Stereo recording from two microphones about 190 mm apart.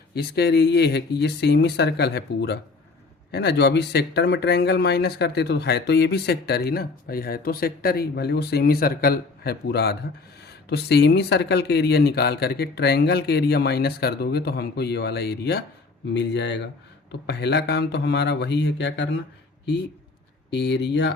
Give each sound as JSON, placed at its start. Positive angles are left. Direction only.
{"t": 0.1, "sound": "speech", "side_deg": 55}
{"t": 20.5, "sound": "speech", "side_deg": 65}